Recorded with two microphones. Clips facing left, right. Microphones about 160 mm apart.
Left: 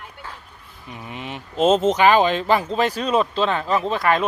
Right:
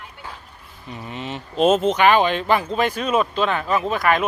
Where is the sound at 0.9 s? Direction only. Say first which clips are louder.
Right 2 dB; 10° left (ahead or behind).